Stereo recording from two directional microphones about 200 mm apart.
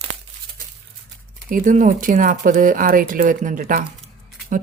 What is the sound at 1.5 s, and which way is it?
Speech, 40° right (ahead or behind).